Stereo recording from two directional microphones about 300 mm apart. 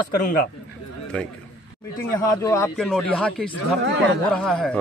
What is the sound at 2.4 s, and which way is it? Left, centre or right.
Speech, centre.